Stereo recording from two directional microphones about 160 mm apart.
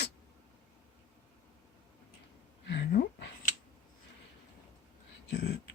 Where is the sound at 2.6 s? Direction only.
90° left.